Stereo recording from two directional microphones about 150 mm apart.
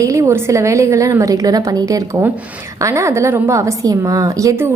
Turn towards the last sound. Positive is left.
turn(degrees=-20)  # may be behind; listen again after turning